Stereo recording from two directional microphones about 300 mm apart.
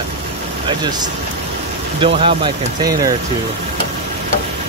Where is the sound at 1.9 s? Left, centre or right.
Centre.